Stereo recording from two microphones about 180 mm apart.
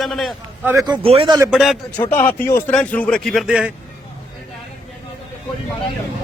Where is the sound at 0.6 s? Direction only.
10° right (ahead or behind).